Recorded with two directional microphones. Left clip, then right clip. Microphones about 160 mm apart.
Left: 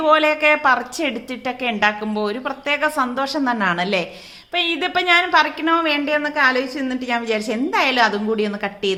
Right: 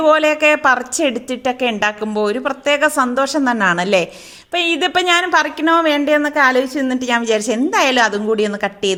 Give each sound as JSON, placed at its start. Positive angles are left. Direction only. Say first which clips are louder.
{"t": 0.0, "sound": "a woman's voice", "louder": "right 3 dB", "side_deg": -45}